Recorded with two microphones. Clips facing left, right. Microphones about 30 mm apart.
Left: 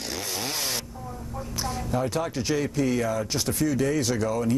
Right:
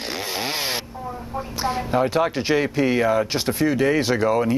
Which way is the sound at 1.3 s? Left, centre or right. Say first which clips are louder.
Right 7 dB; right.